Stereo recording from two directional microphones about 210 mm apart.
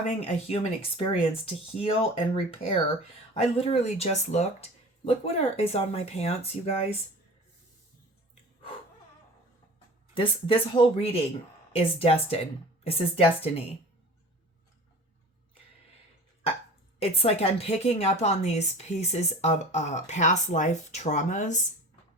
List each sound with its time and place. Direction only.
0.3 s speech: 30° left (ahead or behind)
10.2 s speech: 25° left (ahead or behind)
17.0 s a woman's voice: 30° left (ahead or behind)